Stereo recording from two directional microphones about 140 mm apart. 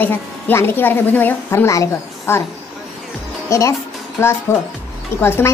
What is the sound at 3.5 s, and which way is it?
A woman's voice, 20° left (ahead or behind).